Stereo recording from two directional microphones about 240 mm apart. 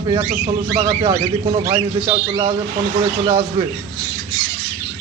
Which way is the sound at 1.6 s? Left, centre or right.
Right.